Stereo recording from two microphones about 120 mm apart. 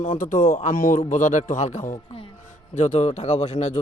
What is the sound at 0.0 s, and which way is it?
Speech, 90° left.